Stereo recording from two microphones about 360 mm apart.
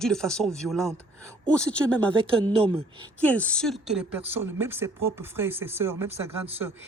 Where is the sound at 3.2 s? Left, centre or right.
Centre.